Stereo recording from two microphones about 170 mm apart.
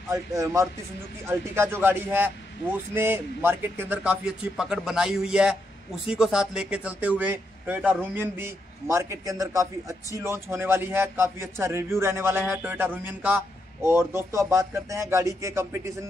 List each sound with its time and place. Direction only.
0.1 s speech: 20° right (ahead or behind)